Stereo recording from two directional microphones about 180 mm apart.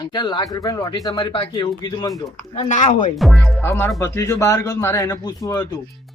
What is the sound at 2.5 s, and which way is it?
Speech, 40° left (ahead or behind).